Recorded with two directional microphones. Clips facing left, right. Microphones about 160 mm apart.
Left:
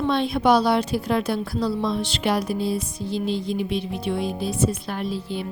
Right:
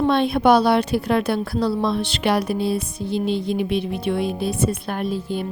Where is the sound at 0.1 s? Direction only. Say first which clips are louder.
Right 1 dB; 60° right (ahead or behind).